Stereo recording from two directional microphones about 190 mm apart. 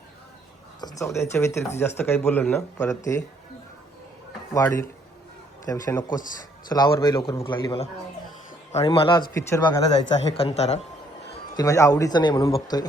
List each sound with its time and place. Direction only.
0.8 s speech: 20° left (ahead or behind)
5.6 s a man's voice: 15° left (ahead or behind)
10.3 s speech: 35° left (ahead or behind)
11.5 s a man's voice: 15° left (ahead or behind)